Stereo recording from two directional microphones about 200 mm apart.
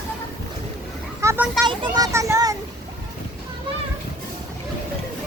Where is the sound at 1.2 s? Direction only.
15° right (ahead or behind).